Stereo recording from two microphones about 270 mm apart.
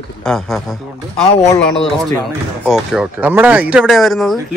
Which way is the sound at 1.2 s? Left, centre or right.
Left.